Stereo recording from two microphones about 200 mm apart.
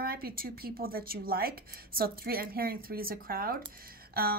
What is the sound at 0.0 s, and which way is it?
A woman's voice, 50° right (ahead or behind).